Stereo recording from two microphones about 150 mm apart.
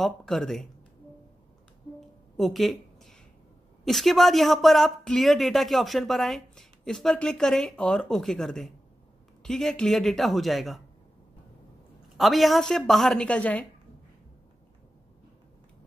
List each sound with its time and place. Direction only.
0.0 s speech: 5° left (ahead or behind)
2.0 s a sound: centre (ahead or behind)
3.8 s speech: centre (ahead or behind)
12.2 s speech: centre (ahead or behind)